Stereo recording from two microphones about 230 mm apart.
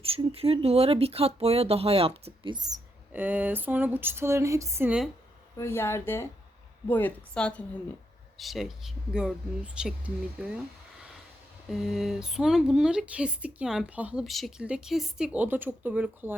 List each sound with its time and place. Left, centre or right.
0.0 s speech: right; by 5.0 s centre
5.5 s speech: centre
11.7 s speech: centre